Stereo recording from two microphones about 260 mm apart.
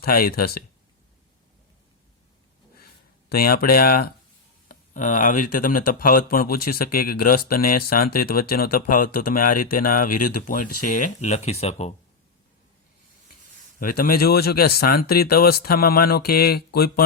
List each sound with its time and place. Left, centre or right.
0.0 s speech: left
3.2 s speech: left
13.7 s speech: left